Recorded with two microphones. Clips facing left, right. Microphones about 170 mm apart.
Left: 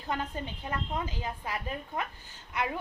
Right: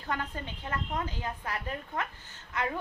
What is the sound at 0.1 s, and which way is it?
A woman's voice, 20° left (ahead or behind).